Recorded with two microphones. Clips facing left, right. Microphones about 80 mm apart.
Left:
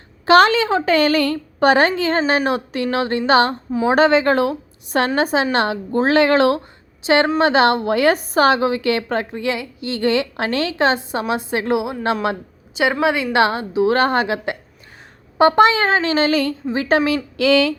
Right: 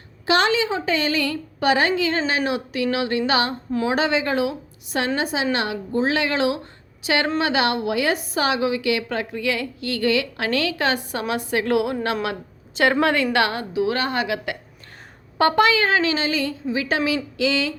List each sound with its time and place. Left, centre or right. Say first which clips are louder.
0.3 s a woman's voice: left 7 dB; left
5.9 s a woman's voice: left 7 dB; left
7.0 s a woman's voice: left 6 dB; left
12.7 s a woman's voice: left 1 dB; centre
13.3 s a woman's voice: left 4 dB; left
13.9 s a woman's voice: left 6 dB; left
16.6 s a woman's voice: left 6 dB; left
17.3 s speech: left 7 dB; left